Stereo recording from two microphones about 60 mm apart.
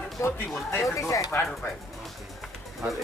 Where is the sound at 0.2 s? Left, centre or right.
Left.